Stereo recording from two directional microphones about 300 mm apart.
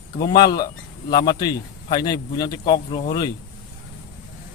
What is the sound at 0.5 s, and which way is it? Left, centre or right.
Speech, centre.